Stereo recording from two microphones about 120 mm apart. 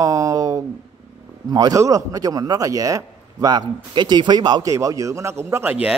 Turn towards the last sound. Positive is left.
turn(degrees=-15)  # may be behind; listen again after turning